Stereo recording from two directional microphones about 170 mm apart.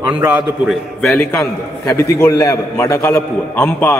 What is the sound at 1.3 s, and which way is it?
A man's voice, 20° left (ahead or behind).